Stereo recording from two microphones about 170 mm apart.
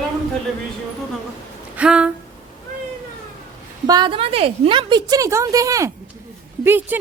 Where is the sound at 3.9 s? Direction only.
25° right (ahead or behind).